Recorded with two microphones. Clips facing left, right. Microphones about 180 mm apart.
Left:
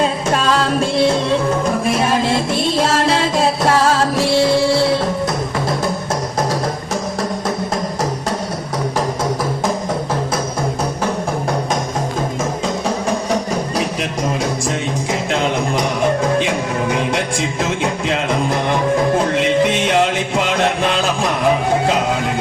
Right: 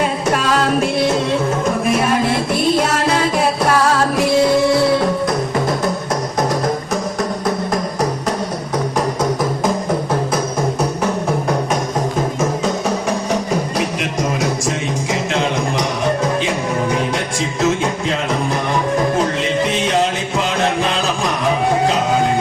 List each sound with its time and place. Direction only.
1.9 s music: 30° left (ahead or behind)